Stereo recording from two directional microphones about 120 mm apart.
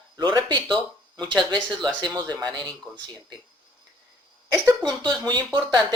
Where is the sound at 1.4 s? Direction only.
40° right (ahead or behind).